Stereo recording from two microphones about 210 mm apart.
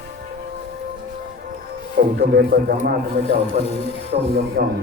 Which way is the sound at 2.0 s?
45° right (ahead or behind).